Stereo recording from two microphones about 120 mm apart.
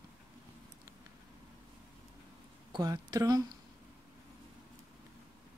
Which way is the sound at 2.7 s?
35° right (ahead or behind).